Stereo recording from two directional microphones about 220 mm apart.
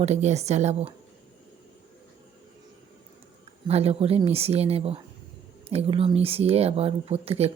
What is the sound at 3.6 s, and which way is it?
Speech, 25° right (ahead or behind).